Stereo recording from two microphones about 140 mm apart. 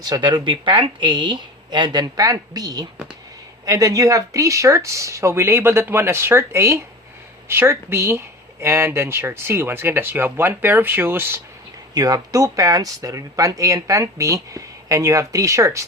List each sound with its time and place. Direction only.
0.0 s speech: 30° right (ahead or behind)